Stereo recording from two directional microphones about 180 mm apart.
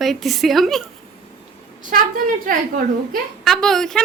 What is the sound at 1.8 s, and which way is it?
A woman's voice, 50° right (ahead or behind).